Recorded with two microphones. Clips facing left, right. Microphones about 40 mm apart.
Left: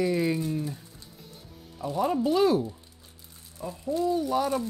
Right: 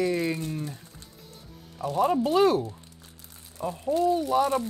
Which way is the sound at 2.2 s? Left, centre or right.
Right.